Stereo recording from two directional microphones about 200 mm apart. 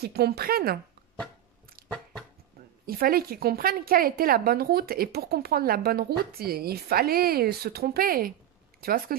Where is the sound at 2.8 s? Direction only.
50° right (ahead or behind).